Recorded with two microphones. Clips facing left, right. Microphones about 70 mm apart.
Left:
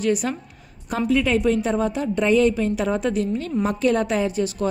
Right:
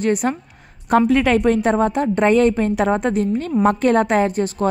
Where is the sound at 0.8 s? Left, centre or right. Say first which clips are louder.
Right 6 dB; right.